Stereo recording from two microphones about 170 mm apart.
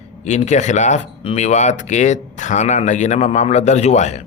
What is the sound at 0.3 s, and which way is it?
Speech, 45° left (ahead or behind).